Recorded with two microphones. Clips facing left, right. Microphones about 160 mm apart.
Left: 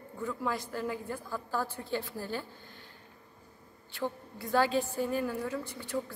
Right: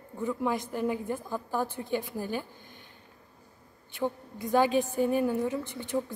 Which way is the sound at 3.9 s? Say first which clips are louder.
Right 4 dB; 20° right (ahead or behind).